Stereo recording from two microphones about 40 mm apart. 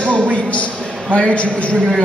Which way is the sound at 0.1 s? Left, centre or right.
Left.